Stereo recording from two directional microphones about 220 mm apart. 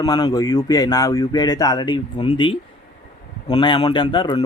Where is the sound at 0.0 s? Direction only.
15° left (ahead or behind).